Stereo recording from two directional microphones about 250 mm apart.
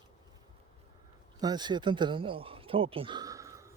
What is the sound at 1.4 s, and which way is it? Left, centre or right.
Speech, centre.